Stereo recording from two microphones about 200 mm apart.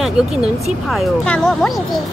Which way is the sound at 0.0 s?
Centre (ahead or behind).